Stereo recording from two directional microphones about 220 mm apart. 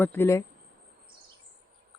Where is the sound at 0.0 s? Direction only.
10° left (ahead or behind).